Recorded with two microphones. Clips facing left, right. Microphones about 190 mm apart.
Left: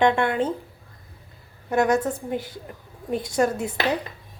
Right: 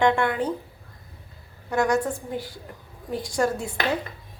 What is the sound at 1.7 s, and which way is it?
A woman's voice, 20° left (ahead or behind).